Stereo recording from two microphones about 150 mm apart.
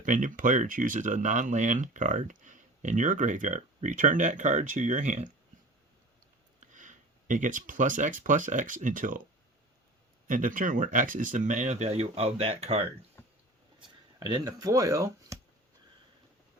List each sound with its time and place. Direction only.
0.0 s speech: 60° right (ahead or behind)
6.6 s speech: 55° right (ahead or behind)
10.2 s speech: 60° right (ahead or behind); by 12.9 s 40° right (ahead or behind)
13.8 s speech: 25° right (ahead or behind)